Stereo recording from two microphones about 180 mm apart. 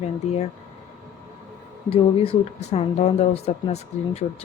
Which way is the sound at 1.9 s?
35° left (ahead or behind).